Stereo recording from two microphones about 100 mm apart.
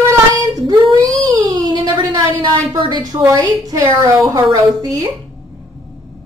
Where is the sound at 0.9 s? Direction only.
40° right (ahead or behind).